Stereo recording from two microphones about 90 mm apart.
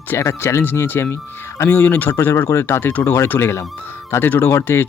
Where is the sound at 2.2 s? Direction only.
35° left (ahead or behind).